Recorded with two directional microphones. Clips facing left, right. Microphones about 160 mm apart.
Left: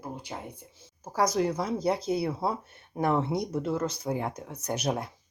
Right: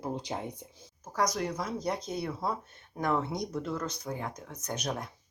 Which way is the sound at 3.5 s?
25° left (ahead or behind).